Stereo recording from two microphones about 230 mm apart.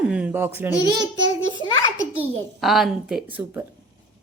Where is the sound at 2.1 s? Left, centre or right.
Centre.